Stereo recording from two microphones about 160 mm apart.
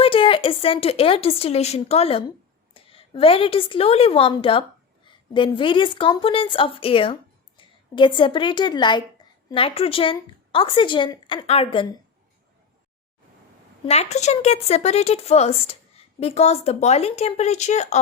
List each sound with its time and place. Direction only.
0.0 s a woman's voice: 35° left (ahead or behind)
13.8 s speech: 40° left (ahead or behind)